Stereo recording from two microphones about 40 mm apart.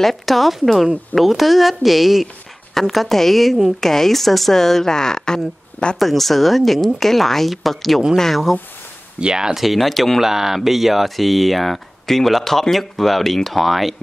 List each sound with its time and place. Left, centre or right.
0.0 s a woman's voice: centre; by 5.9 s left
5.9 s speech: centre
9.2 s speech: centre
9.6 s speech: centre
10.2 s speech: centre